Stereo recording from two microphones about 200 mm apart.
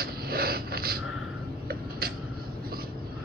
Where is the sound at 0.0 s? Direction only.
50° right (ahead or behind).